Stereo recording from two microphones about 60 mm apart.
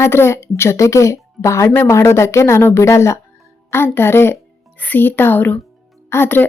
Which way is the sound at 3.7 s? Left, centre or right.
Left.